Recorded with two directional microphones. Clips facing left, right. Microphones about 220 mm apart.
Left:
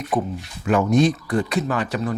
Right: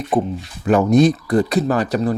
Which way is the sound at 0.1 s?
30° right (ahead or behind).